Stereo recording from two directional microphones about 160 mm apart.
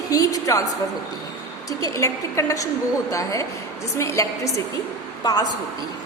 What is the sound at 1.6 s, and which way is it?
A woman's voice, 20° left (ahead or behind).